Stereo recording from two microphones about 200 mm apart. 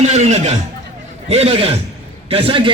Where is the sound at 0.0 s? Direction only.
35° right (ahead or behind).